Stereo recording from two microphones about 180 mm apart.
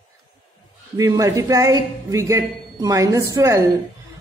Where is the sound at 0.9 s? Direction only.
20° right (ahead or behind).